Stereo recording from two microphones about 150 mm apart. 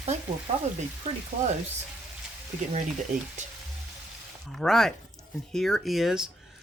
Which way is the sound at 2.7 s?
55° right (ahead or behind).